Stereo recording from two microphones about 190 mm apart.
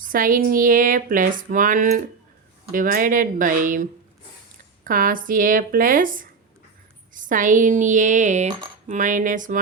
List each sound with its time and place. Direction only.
0.0 s speech: 45° right (ahead or behind)